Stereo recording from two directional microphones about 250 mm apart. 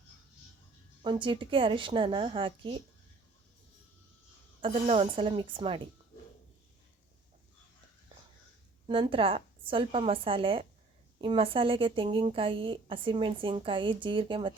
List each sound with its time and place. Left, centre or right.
1.0 s a woman's voice: centre
4.6 s a woman's voice: right
8.9 s a woman's voice: right